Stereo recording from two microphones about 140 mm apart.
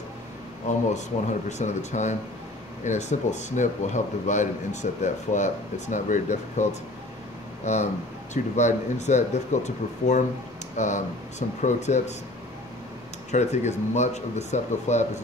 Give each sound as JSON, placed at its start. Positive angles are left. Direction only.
{"t": 0.7, "sound": "speech", "side_deg": 60}
{"t": 13.3, "sound": "speech", "side_deg": 55}